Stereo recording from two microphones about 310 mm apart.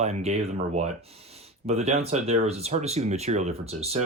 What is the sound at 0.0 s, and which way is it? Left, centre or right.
Speech, right.